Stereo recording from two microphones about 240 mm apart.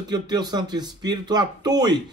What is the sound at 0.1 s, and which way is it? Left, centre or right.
Speech, centre.